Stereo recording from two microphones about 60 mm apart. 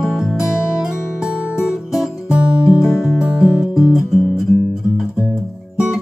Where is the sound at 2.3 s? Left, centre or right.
Centre.